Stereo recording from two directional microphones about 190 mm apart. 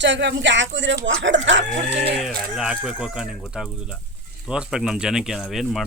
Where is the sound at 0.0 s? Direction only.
70° right (ahead or behind).